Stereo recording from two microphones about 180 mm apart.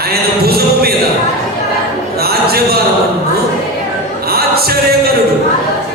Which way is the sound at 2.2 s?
60° right (ahead or behind).